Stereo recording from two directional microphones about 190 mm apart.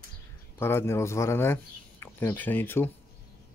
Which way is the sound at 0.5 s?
10° left (ahead or behind).